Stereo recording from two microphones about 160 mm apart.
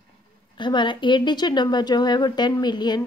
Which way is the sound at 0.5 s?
30° left (ahead or behind).